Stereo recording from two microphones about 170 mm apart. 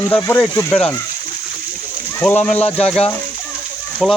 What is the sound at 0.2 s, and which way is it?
Speech, 15° left (ahead or behind).